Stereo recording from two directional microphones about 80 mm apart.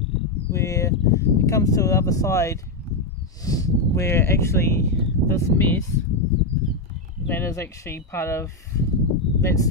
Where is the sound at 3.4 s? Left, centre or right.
Left.